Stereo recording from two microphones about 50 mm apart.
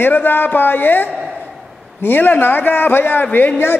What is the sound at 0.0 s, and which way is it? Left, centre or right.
A man's voice, left.